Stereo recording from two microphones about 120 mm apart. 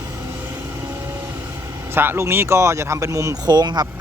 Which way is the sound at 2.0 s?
20° right (ahead or behind).